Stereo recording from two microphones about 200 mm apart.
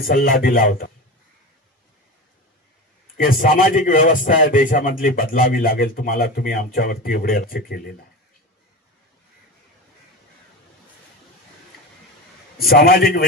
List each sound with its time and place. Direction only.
0.0 s a man's voice: 45° left (ahead or behind)
3.2 s a man's voice: 45° left (ahead or behind)
12.5 s a man's voice: 50° left (ahead or behind)